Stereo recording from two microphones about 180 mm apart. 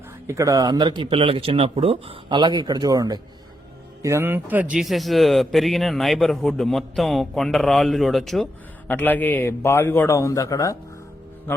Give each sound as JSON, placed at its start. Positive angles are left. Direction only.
{"t": 0.3, "sound": "a man's voice", "side_deg": -15}